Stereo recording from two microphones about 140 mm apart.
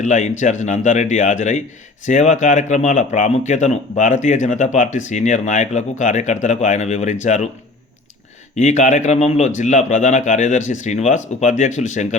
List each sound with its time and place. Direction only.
0.0 s speech: 60° left (ahead or behind)
8.5 s speech: 60° left (ahead or behind)